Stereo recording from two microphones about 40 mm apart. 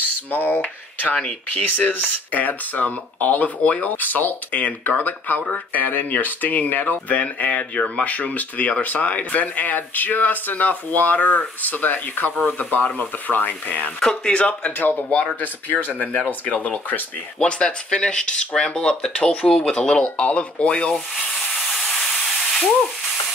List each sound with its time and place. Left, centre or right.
0.3 s speech: left
0.6 s speech: left
1.5 s speech: left
7.7 s speech: left
8.0 s speech: left
12.8 s speech: left
13.3 s speech: left
13.9 s speech: left
14.8 s speech: left
17.4 s speech: left
21.5 s steam: centre